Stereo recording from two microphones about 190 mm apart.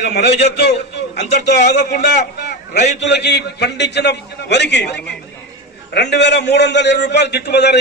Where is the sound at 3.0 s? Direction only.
65° left (ahead or behind).